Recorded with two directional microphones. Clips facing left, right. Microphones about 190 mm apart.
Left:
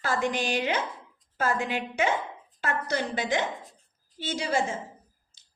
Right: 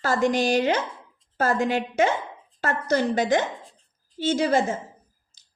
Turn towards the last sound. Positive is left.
turn(degrees=-45)  # may be behind; listen again after turning